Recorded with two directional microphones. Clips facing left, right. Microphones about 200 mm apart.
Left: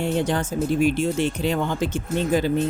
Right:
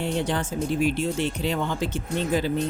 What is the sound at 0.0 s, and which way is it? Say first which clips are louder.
Speech: left 3 dB; 45° left (ahead or behind).